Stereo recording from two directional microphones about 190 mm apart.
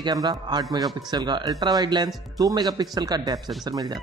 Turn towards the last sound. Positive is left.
turn(degrees=-20)  # may be behind; listen again after turning